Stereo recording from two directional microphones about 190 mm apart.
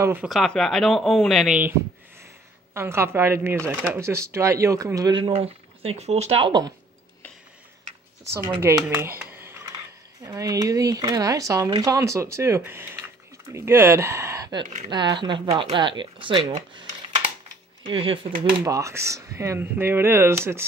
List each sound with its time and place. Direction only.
0.0 s speech: 10° right (ahead or behind)
0.3 s speech: centre (ahead or behind)
2.7 s speech: 15° right (ahead or behind)
8.5 s speech: 15° right (ahead or behind)
17.8 s speech: 30° right (ahead or behind)
18.6 s speech: 15° right (ahead or behind)